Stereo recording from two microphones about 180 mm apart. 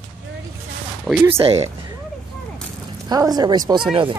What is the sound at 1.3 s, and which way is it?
Speech, 35° right (ahead or behind).